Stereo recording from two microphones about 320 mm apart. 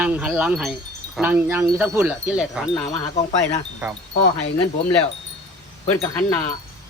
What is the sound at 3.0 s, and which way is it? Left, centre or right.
Speech, left.